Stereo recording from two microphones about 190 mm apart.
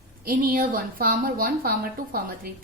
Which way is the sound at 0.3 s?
50° right (ahead or behind).